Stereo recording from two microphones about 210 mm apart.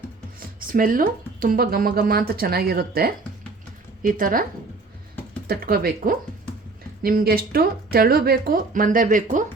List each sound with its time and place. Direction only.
0.3 s speech: 40° right (ahead or behind)
5.5 s speech: 45° right (ahead or behind)